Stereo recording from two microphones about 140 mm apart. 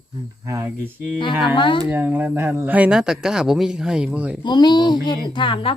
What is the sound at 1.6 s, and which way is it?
Speech, 35° left (ahead or behind).